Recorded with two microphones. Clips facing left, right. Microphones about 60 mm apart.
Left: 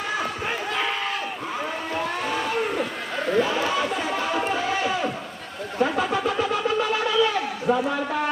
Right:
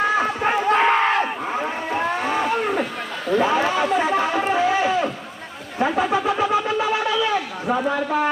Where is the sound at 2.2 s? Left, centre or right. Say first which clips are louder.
Right 4 dB; right.